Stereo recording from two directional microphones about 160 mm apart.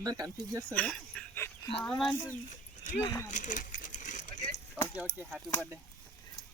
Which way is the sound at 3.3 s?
55° left (ahead or behind).